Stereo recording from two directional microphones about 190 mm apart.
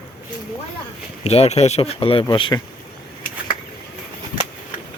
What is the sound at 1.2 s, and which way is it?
Speech, 35° left (ahead or behind).